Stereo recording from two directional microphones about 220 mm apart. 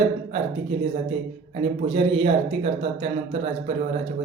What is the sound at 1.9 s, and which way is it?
Speech, 25° right (ahead or behind).